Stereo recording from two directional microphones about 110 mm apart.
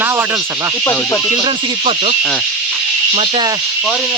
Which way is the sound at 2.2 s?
5° left (ahead or behind).